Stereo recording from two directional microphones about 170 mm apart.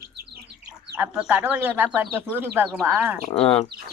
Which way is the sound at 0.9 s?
5° right (ahead or behind).